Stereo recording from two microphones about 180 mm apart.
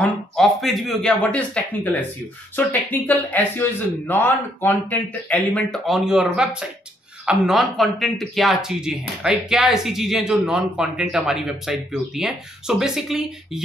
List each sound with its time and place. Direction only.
0.0 s speech: centre (ahead or behind)